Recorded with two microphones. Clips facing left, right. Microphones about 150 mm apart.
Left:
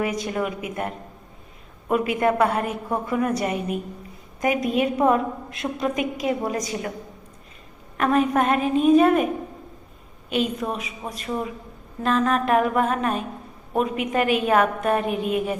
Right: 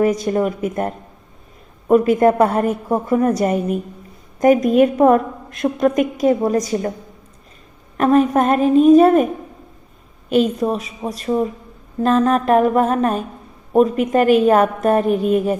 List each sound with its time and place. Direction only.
0.0 s a woman's voice: 40° right (ahead or behind)
7.9 s a woman's voice: 35° right (ahead or behind)